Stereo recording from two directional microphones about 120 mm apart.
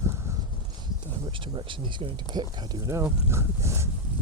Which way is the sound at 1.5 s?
45° right (ahead or behind).